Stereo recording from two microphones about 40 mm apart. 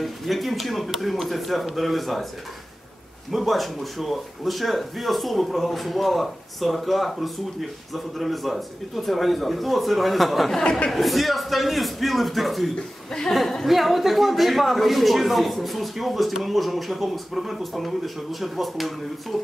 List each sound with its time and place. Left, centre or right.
0.0 s speech: centre
3.3 s speech: centre
10.6 s speech: left
10.9 s speech: centre